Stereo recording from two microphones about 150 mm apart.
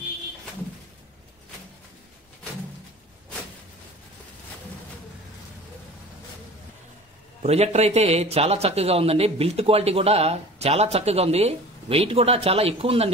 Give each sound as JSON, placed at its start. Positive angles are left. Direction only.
{"t": 7.4, "sound": "a man's voice", "side_deg": -45}